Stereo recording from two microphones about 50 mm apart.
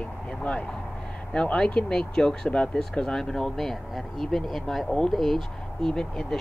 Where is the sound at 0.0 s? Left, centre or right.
Left.